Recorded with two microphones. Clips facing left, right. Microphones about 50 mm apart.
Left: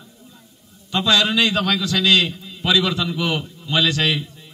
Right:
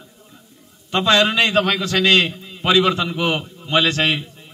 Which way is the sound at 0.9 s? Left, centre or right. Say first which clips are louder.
Right 2 dB; right.